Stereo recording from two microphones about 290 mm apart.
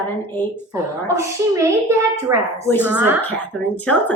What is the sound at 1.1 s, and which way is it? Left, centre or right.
A child's voice, centre.